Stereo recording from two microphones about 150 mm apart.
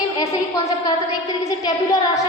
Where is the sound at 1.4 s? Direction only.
25° left (ahead or behind).